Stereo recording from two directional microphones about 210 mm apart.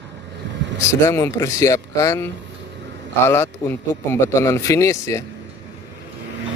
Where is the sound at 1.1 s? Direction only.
15° left (ahead or behind).